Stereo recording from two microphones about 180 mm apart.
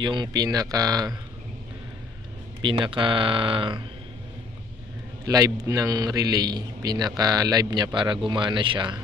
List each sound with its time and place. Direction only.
0.0 s a man's voice: 25° right (ahead or behind)
2.6 s a man's voice: 30° right (ahead or behind)
5.2 s a man's voice: 20° right (ahead or behind)